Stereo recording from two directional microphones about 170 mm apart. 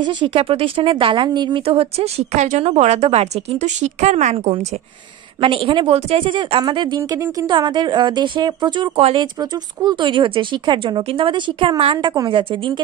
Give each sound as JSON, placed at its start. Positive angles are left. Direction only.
{"t": 0.0, "sound": "speech", "side_deg": -25}
{"t": 7.0, "sound": "speech", "side_deg": -15}